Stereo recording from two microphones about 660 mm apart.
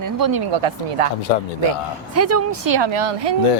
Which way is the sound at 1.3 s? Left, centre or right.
Left.